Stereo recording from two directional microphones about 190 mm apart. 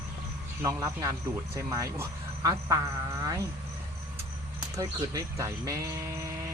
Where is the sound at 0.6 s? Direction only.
15° right (ahead or behind).